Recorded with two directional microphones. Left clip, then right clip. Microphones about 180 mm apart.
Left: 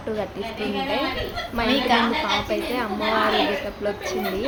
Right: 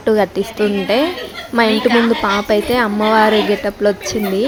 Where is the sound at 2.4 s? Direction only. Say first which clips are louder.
Right 10 dB; 50° right (ahead or behind).